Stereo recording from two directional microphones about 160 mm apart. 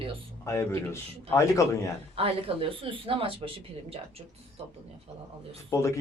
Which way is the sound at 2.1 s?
35° right (ahead or behind).